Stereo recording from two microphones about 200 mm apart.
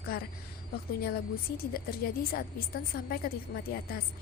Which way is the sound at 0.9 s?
50° left (ahead or behind).